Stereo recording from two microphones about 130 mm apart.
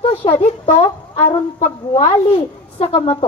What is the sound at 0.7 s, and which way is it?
A woman's voice, 55° left (ahead or behind).